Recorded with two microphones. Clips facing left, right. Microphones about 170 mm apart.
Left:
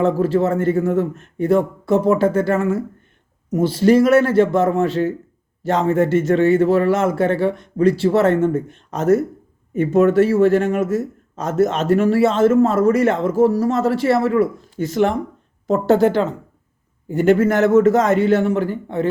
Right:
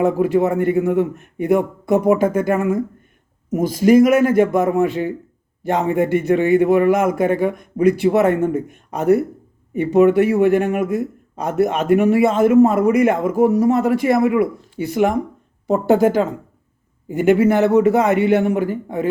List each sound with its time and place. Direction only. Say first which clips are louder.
0.0 s speech: right 1 dB; 15° right (ahead or behind)